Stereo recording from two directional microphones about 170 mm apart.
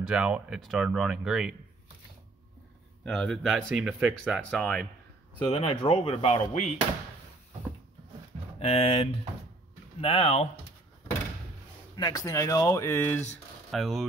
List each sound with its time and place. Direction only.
0.0 s speech: 5° right (ahead or behind)
3.1 s speech: centre (ahead or behind)
4.5 s speech: 5° left (ahead or behind)
5.5 s speech: 35° left (ahead or behind)
8.5 s speech: 35° left (ahead or behind)
12.0 s speech: 20° left (ahead or behind); by 14.0 s centre (ahead or behind)